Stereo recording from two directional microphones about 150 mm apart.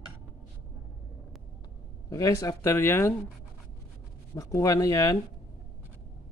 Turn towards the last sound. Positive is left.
turn(degrees=20)  # may be behind; listen again after turning